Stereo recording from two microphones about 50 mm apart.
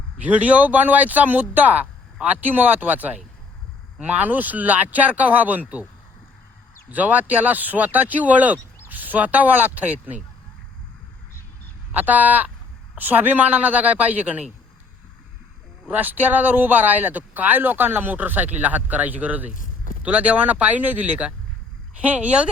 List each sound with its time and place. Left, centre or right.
0.2 s speech: right
6.9 s speech: right
11.9 s speech: right
15.9 s speech: right